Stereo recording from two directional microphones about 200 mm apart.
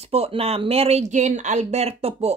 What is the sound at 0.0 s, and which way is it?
Speech, 30° right (ahead or behind).